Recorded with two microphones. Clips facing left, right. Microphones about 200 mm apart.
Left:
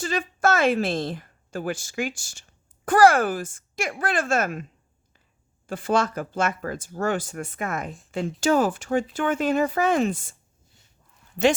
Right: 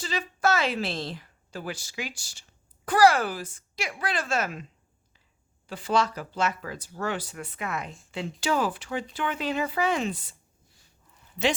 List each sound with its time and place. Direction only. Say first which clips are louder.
0.0 s a woman's voice: left 3 dB; 50° left (ahead or behind)
5.6 s speech: left 3 dB; 50° left (ahead or behind)